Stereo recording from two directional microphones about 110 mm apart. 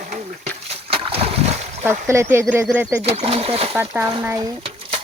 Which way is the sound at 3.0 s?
65° right (ahead or behind).